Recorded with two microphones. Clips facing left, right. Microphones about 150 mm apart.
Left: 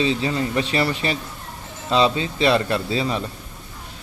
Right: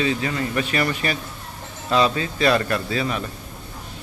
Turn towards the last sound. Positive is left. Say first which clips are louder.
# left 1 dB
turn(degrees=25)  # may be behind; listen again after turning